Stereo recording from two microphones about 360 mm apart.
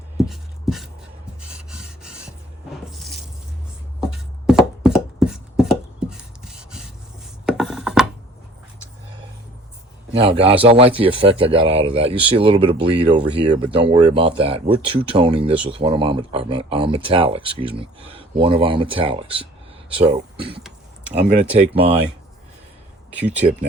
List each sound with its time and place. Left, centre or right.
0.3 s a sound: centre
2.9 s a sound: centre
4.0 s chopping: centre
7.4 s rub: centre
10.1 s a man's voice: centre
21.2 s speech: centre
21.8 s a man's voice: centre